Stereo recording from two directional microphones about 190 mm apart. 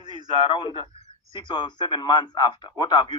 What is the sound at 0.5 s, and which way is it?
A man's voice, 25° left (ahead or behind).